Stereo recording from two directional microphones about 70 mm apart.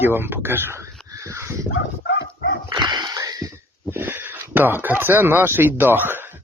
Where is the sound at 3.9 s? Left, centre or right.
Right.